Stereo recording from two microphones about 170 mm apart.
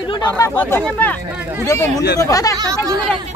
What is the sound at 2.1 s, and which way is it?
Speech, 20° left (ahead or behind).